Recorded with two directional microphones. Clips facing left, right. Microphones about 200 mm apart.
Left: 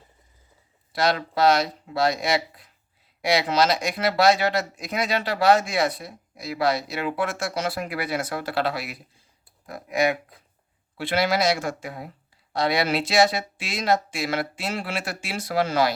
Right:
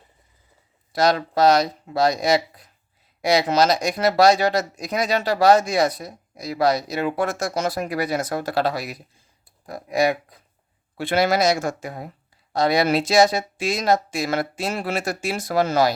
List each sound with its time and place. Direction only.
0.9 s speech: 40° right (ahead or behind)
10.9 s speech: 50° right (ahead or behind)